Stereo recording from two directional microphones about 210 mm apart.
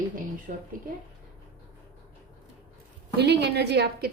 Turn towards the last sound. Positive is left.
turn(degrees=-50)  # may be behind; listen again after turning